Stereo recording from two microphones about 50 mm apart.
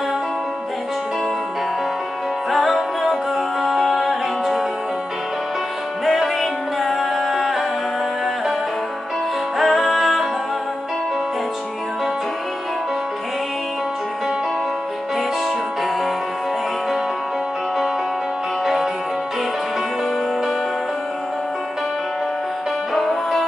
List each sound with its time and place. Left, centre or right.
2.5 s music: centre
6.0 s music: centre
9.6 s music: centre
22.9 s music: centre